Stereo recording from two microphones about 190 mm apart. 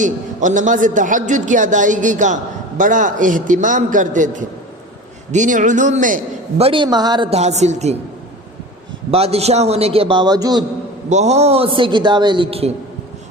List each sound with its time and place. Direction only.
0.0 s a man's voice: 40° right (ahead or behind)
6.6 s a man's voice: 30° right (ahead or behind)
9.0 s a man's voice: 30° right (ahead or behind)
11.1 s a man's voice: 35° right (ahead or behind)